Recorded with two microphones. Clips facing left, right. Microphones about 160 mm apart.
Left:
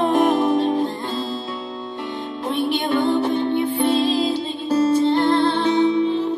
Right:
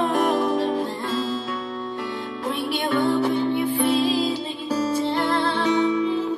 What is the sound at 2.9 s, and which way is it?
Music, 25° left (ahead or behind).